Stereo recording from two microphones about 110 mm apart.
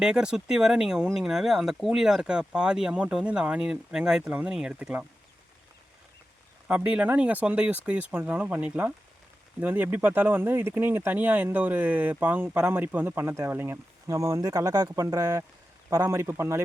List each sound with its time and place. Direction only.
0.0 s speech: 5° right (ahead or behind)
6.7 s speech: 10° right (ahead or behind)